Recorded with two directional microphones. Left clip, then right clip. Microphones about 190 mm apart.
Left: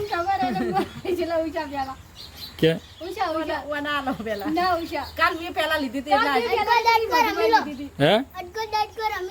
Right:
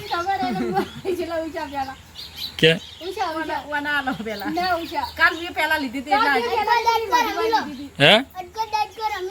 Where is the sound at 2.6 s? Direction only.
10° left (ahead or behind).